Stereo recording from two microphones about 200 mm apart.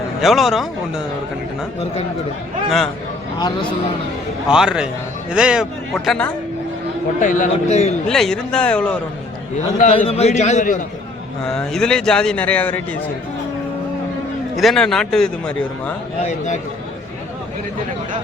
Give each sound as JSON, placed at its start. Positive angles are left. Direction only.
{"t": 0.2, "sound": "a man's voice", "side_deg": 0}
{"t": 2.6, "sound": "a man's voice", "side_deg": 0}
{"t": 3.3, "sound": "speech", "side_deg": 20}
{"t": 4.4, "sound": "a man's voice", "side_deg": -5}
{"t": 7.2, "sound": "a man's voice", "side_deg": 40}
{"t": 8.0, "sound": "a man's voice", "side_deg": 5}
{"t": 10.1, "sound": "a man's voice", "side_deg": 30}
{"t": 11.5, "sound": "a man's voice", "side_deg": 5}
{"t": 14.5, "sound": "a man's voice", "side_deg": 0}
{"t": 16.2, "sound": "a man's voice", "side_deg": 35}